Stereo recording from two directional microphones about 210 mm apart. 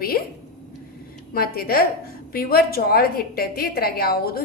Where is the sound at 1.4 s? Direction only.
45° left (ahead or behind).